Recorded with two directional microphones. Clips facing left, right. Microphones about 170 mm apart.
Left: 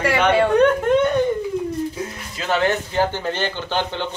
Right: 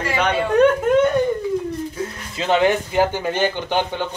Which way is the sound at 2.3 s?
20° right (ahead or behind).